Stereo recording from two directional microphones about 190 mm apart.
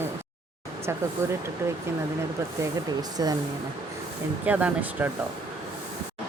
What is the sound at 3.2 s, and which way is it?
Speech, 20° right (ahead or behind).